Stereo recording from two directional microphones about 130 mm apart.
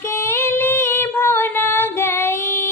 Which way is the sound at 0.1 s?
20° left (ahead or behind).